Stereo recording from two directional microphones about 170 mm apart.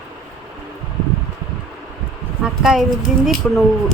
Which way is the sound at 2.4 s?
5° right (ahead or behind).